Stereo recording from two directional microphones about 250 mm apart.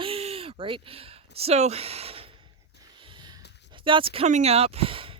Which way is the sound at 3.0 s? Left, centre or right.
Centre.